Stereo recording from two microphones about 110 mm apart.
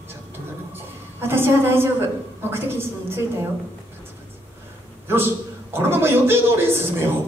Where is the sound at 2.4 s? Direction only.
20° right (ahead or behind).